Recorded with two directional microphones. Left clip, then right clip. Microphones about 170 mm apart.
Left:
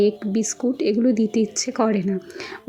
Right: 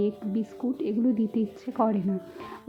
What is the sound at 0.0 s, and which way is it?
A woman's voice, 15° left (ahead or behind).